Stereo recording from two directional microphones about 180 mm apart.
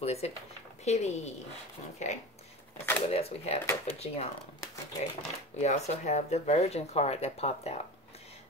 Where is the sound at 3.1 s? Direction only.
35° left (ahead or behind).